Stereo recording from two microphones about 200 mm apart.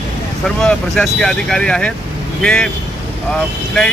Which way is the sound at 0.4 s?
Centre (ahead or behind).